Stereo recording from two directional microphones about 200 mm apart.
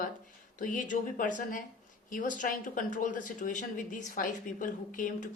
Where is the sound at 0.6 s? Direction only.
40° left (ahead or behind).